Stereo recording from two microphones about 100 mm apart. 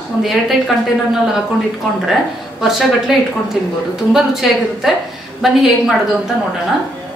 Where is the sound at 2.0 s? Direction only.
5° right (ahead or behind).